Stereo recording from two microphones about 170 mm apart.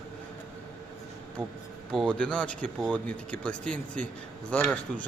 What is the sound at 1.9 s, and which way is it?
Speech, 5° left (ahead or behind).